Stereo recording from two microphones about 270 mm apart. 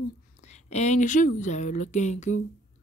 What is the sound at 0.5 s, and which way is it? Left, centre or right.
A woman's voice, left.